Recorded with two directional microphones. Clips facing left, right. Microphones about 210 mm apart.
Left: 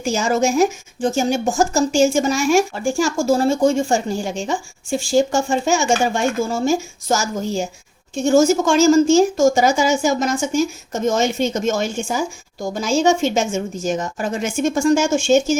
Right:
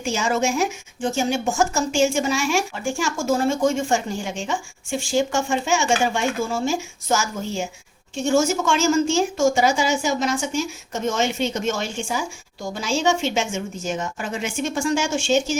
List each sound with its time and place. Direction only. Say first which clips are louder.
0.0 s speech: left 4 dB; 40° left (ahead or behind)